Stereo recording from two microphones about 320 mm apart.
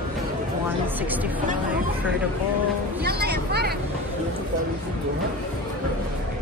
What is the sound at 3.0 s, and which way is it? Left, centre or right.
Speech, right.